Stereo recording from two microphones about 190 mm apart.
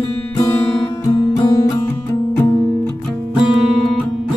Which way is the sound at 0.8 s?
25° left (ahead or behind).